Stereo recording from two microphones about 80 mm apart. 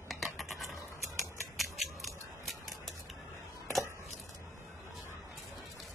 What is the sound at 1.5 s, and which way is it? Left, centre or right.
Scissors, centre.